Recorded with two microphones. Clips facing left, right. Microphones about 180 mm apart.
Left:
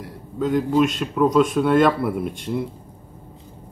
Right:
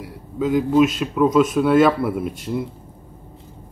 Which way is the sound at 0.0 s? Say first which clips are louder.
Right 1 dB; 5° right (ahead or behind).